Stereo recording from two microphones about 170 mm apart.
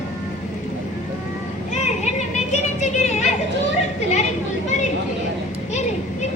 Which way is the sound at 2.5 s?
45° left (ahead or behind).